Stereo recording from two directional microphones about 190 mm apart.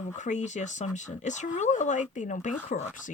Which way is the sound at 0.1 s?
40° left (ahead or behind).